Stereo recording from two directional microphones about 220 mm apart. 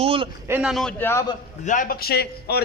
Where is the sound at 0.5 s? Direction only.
Centre (ahead or behind).